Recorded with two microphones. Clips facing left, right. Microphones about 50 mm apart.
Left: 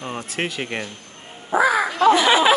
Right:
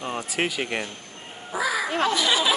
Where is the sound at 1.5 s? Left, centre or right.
Left.